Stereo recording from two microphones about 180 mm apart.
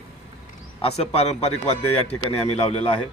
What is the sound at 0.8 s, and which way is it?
A man's voice, 35° left (ahead or behind).